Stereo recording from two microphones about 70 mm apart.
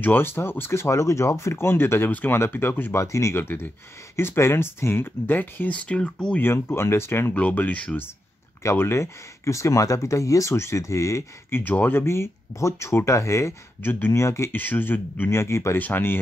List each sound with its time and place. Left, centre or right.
0.0 s speech: left; by 6.4 s centre
6.4 s speech: left
7.3 s speech: left
8.6 s speech: left
11.6 s speech: left
13.8 s speech: left
14.6 s speech: left